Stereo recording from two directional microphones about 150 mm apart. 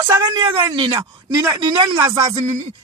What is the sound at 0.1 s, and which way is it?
Speech, 25° right (ahead or behind).